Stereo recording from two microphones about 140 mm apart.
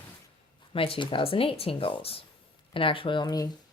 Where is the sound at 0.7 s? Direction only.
40° left (ahead or behind).